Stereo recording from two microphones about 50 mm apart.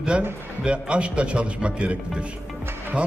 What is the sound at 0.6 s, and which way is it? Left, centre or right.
Speech, right.